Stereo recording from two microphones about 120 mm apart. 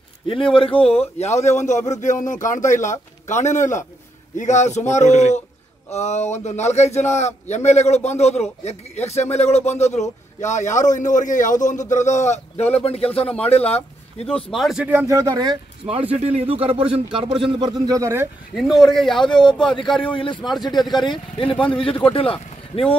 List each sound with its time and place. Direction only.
0.3 s a man's voice: 45° left (ahead or behind); by 3.5 s 90° left
4.4 s speech: 80° left; by 13.8 s 55° left (ahead or behind)
14.5 s speech: centre (ahead or behind)
15.0 s speech: 30° right (ahead or behind)
15.9 s speech: 55° right (ahead or behind)
17.8 s speech: 25° right (ahead or behind)
18.5 s speech: centre (ahead or behind)
19.3 s speech: 40° left (ahead or behind)
21.5 s a man's voice: 10° left (ahead or behind)
22.1 s speech: 50° left (ahead or behind)